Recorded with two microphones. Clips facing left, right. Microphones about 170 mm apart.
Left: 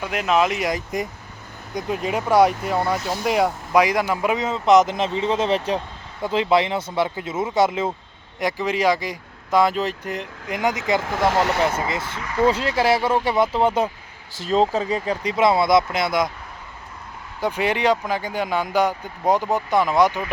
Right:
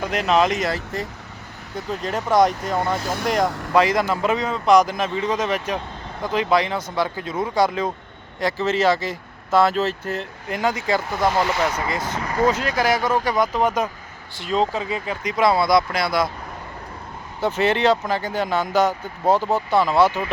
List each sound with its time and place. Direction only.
0.0 s speech: 10° left (ahead or behind)
11.0 s speech: 90° left; by 11.6 s 70° left (ahead or behind)
11.8 s speech: 25° left (ahead or behind)
12.2 s speech: 45° right (ahead or behind)
12.5 s speech: 30° left (ahead or behind)
14.3 s speech: 40° left (ahead or behind); by 16.3 s 20° left (ahead or behind)
17.4 s speech: 10° left (ahead or behind)